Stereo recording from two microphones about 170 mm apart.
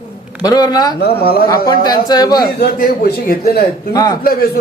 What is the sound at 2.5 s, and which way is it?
Speech, 65° left (ahead or behind).